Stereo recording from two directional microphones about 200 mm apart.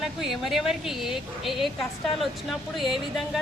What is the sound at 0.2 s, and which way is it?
A woman's voice, centre (ahead or behind).